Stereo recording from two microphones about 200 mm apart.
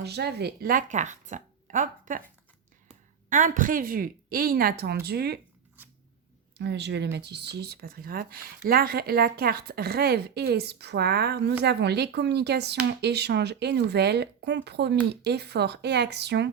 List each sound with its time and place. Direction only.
0.0 s speech: 55° right (ahead or behind)
3.2 s speech: 40° right (ahead or behind)
6.6 s speech: 60° right (ahead or behind)